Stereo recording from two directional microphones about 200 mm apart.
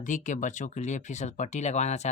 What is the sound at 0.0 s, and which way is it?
Speech, 40° left (ahead or behind).